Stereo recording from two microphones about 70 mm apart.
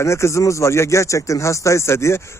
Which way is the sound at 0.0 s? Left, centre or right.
Left.